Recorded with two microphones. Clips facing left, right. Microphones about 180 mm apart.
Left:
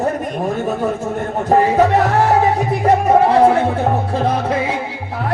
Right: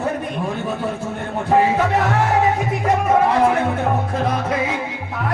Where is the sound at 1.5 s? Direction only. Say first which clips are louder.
Left 4 dB; 40° left (ahead or behind).